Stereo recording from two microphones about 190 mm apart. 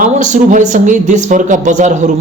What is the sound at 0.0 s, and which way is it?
A man's voice, 40° right (ahead or behind).